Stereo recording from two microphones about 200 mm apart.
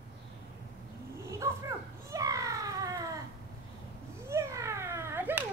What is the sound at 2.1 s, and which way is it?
Children playing, 15° right (ahead or behind).